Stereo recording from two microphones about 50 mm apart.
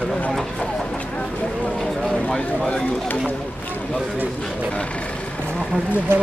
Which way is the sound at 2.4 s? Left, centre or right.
Centre.